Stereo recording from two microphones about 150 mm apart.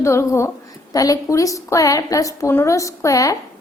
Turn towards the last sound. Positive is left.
turn(degrees=20)  # may be behind; listen again after turning